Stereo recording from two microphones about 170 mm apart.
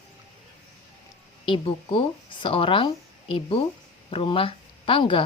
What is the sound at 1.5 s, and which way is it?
Speech, 30° left (ahead or behind).